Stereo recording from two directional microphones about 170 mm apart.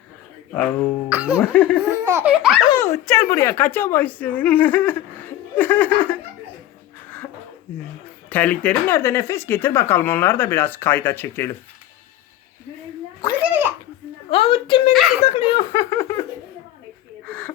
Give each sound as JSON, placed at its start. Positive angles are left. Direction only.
{"t": 0.5, "sound": "speech", "side_deg": 10}
{"t": 1.1, "sound": "laughter", "side_deg": -10}
{"t": 1.4, "sound": "speech", "side_deg": 10}
{"t": 2.0, "sound": "laughter", "side_deg": -10}
{"t": 2.8, "sound": "speech", "side_deg": 15}
{"t": 8.3, "sound": "speech", "side_deg": 10}
{"t": 13.4, "sound": "a sound", "side_deg": -10}
{"t": 14.3, "sound": "a woman's voice", "side_deg": 35}
{"t": 14.9, "sound": "speech", "side_deg": 0}
{"t": 15.2, "sound": "a woman's voice", "side_deg": 35}
{"t": 15.7, "sound": "a sound", "side_deg": 15}
{"t": 17.2, "sound": "a sound", "side_deg": 10}